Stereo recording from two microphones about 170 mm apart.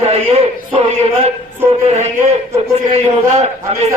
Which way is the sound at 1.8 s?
40° right (ahead or behind).